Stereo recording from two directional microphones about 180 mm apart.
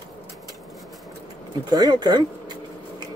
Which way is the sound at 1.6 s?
20° right (ahead or behind).